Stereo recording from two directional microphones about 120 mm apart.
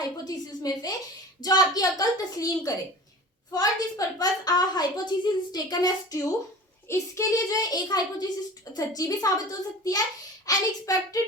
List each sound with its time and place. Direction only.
0.3 s a woman's voice: 30° left (ahead or behind)